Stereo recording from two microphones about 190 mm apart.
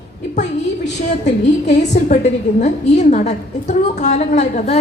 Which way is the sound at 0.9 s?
40° left (ahead or behind).